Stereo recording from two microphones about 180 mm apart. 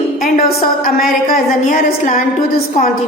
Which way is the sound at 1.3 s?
55° left (ahead or behind).